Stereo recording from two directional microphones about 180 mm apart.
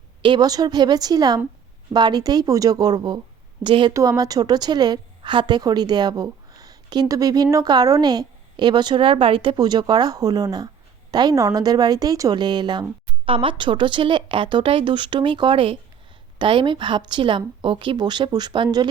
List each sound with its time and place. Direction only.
0.2 s a woman's voice: 25° right (ahead or behind)